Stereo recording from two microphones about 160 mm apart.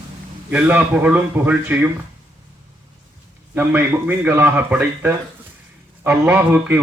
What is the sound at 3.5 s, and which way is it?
A man's voice, 10° right (ahead or behind).